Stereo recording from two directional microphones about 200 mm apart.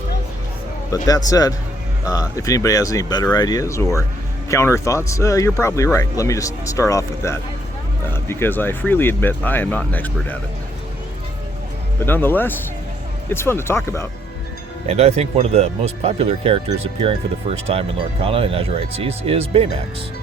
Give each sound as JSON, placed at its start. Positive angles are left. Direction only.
{"t": 0.9, "sound": "speech", "side_deg": 20}
{"t": 11.9, "sound": "speech", "side_deg": 10}
{"t": 14.8, "sound": "speech", "side_deg": -30}